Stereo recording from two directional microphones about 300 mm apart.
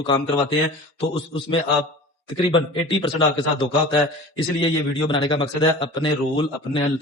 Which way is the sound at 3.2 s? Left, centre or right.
Centre.